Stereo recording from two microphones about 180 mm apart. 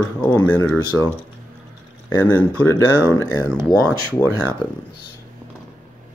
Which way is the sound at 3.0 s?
15° left (ahead or behind).